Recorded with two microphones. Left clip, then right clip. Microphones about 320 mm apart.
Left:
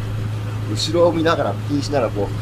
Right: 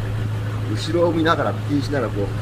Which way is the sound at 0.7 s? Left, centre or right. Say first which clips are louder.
Left 3 dB; centre.